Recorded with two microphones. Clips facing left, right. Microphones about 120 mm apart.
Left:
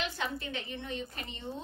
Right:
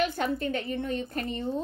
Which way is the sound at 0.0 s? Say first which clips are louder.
Right 9 dB; 45° right (ahead or behind).